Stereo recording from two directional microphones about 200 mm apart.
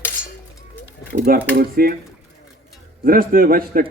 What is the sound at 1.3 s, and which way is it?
Speech, 45° right (ahead or behind).